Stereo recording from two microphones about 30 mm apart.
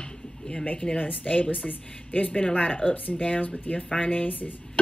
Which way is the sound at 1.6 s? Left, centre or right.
Left.